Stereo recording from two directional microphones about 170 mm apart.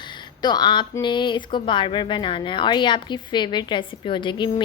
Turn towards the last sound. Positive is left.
turn(degrees=30)  # may be behind; listen again after turning